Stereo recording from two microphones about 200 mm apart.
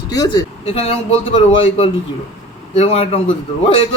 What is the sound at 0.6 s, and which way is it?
A man's voice, 30° left (ahead or behind).